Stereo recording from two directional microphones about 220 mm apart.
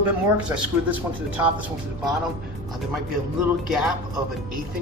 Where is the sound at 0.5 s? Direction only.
5° right (ahead or behind).